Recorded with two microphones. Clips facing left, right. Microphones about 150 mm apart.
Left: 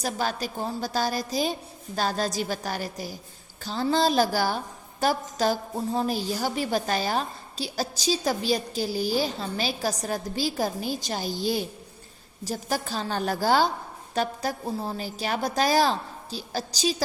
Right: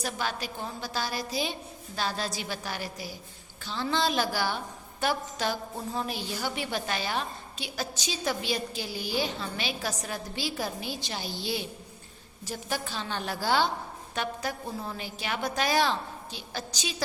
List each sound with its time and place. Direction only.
0.0 s a woman's voice: 40° left (ahead or behind)